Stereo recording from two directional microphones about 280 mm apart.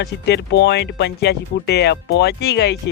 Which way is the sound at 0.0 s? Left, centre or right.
Left.